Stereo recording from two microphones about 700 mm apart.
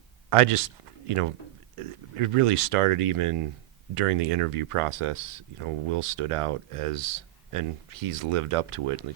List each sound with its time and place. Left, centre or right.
0.3 s speech: right